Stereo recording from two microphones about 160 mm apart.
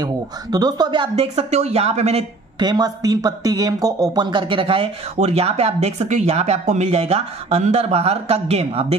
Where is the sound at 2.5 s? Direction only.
25° right (ahead or behind).